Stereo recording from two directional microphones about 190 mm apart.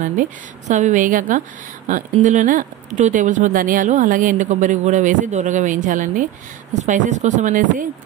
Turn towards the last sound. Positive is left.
turn(degrees=-40)  # may be behind; listen again after turning